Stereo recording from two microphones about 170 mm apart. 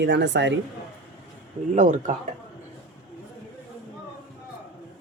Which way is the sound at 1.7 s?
45° right (ahead or behind).